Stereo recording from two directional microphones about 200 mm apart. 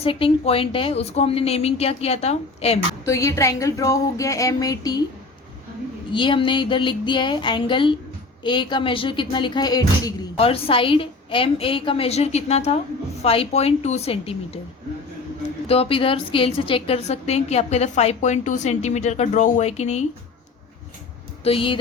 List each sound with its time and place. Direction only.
0.0 s a woman's voice: 25° left (ahead or behind)
3.0 s speech: 15° left (ahead or behind)
6.1 s a woman's voice: 25° left (ahead or behind)
15.6 s a woman's voice: 30° left (ahead or behind)
21.4 s a woman's voice: 25° left (ahead or behind)